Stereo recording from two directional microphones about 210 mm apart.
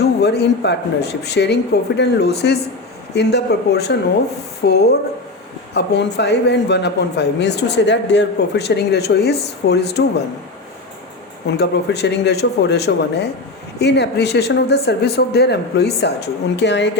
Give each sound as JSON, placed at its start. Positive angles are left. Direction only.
{"t": 0.2, "sound": "speech", "side_deg": 50}
{"t": 11.5, "sound": "speech", "side_deg": 50}